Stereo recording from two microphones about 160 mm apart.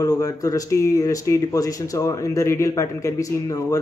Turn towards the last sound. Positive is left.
turn(degrees=20)  # may be behind; listen again after turning